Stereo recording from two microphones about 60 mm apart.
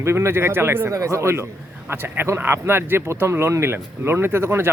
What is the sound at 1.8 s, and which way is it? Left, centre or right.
A man's voice, right.